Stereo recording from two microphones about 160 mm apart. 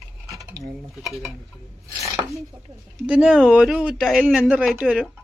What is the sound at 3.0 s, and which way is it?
Speech, 5° right (ahead or behind).